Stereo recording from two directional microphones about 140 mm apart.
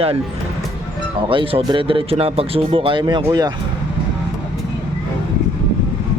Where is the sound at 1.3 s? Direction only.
40° right (ahead or behind).